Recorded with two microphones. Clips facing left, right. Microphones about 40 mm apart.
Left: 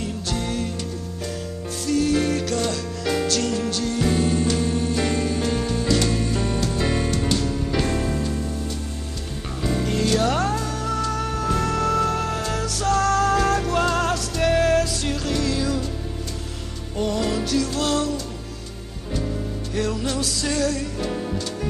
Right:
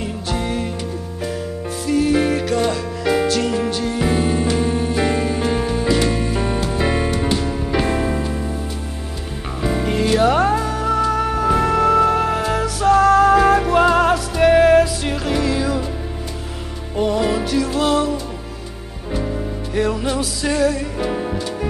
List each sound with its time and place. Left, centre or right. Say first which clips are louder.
0.0 s music: right 4 dB; centre
1.9 s music: right 4 dB; centre
9.6 s music: right 4 dB; centre
16.9 s music: right 5 dB; centre